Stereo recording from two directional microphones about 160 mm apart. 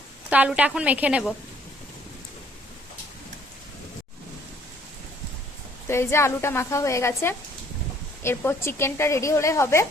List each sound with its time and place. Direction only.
0.3 s a woman's voice: 10° right (ahead or behind)
5.9 s speech: 15° left (ahead or behind)